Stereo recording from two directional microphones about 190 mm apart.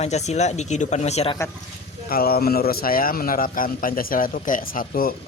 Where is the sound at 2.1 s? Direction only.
50° left (ahead or behind).